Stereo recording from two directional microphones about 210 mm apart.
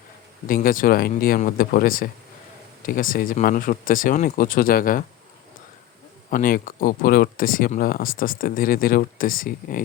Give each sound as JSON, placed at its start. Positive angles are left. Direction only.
{"t": 0.4, "sound": "speech", "side_deg": 40}
{"t": 6.3, "sound": "speech", "side_deg": 40}